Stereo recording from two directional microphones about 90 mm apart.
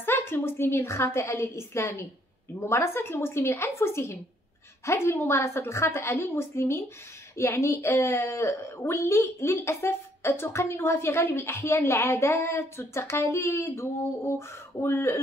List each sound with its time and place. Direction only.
0.0 s a woman's voice: 25° left (ahead or behind)